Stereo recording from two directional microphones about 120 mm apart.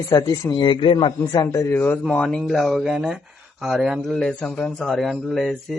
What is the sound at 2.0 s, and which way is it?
A man's voice, 5° left (ahead or behind).